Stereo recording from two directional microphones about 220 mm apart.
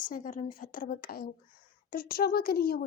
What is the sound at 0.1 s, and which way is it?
A woman's voice, 35° left (ahead or behind).